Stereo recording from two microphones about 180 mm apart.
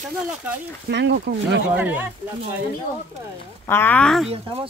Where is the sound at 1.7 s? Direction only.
10° right (ahead or behind).